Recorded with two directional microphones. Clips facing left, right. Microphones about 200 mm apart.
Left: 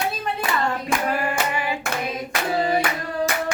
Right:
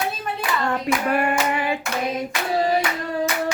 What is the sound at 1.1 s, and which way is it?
Hands, 60° right (ahead or behind).